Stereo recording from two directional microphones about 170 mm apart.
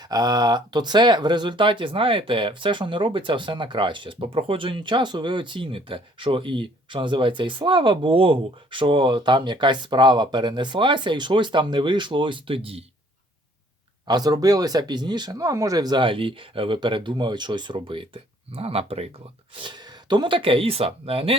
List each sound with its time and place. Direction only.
0.0 s speech: 20° right (ahead or behind)
14.1 s speech: 25° right (ahead or behind)